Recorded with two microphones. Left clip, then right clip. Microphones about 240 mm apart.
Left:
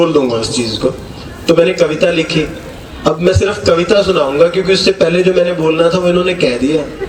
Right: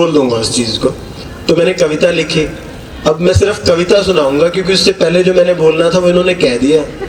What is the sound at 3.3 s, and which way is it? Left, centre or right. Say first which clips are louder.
A man's voice: even; right.